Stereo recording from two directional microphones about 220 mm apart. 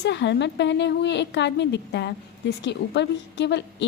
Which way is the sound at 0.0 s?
55° left (ahead or behind).